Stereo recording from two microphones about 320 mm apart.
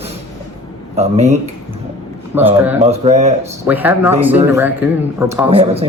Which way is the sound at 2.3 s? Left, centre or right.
Centre.